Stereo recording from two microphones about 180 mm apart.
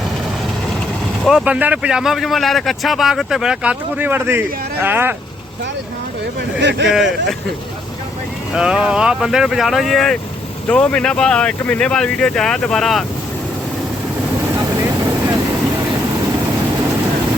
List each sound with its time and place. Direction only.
1.2 s speech: 5° right (ahead or behind)
6.6 s speech: 70° right (ahead or behind)
6.8 s speech: centre (ahead or behind)
8.5 s speech: 5° right (ahead or behind)